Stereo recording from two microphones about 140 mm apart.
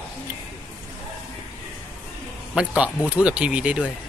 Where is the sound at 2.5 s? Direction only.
5° right (ahead or behind).